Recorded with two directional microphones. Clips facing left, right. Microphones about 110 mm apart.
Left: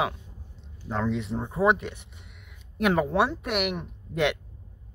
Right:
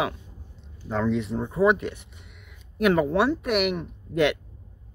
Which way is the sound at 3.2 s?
20° left (ahead or behind).